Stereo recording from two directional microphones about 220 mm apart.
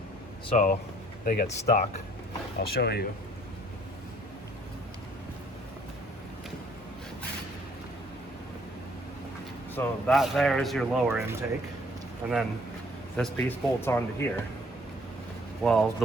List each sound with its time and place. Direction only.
0.5 s speech: 35° left (ahead or behind)
2.6 s speech: 45° left (ahead or behind)
9.7 s speech: 10° left (ahead or behind); by 12.4 s 5° right (ahead or behind)
13.1 s speech: 10° left (ahead or behind)
15.6 s speech: centre (ahead or behind)